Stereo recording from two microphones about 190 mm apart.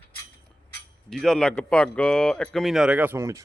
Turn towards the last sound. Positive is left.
turn(degrees=-15)  # may be behind; listen again after turning